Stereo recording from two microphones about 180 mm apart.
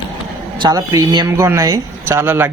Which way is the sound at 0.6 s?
20° right (ahead or behind).